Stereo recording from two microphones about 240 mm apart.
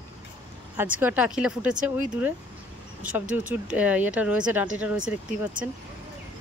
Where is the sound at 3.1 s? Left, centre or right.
Centre.